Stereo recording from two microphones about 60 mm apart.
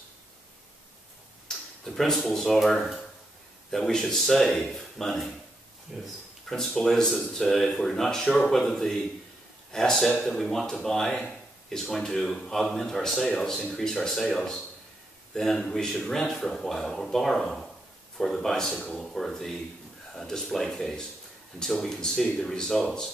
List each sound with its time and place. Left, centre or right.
1.5 s a sound: centre
1.9 s speech: centre
6.5 s speech: centre
13.6 s speech: centre
13.9 s a man's voice: centre